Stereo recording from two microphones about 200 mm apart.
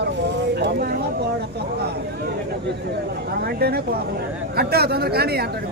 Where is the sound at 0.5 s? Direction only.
50° right (ahead or behind).